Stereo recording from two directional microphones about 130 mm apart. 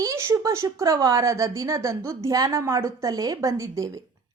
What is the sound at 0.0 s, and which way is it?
A woman's voice, 20° right (ahead or behind).